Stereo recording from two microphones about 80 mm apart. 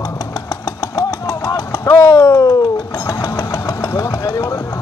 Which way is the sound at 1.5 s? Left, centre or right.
Left.